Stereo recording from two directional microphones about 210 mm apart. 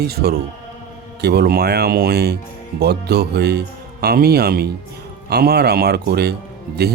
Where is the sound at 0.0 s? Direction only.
50° right (ahead or behind).